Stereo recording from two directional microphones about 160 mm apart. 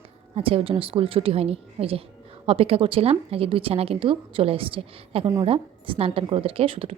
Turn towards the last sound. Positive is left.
turn(degrees=-35)  # may be behind; listen again after turning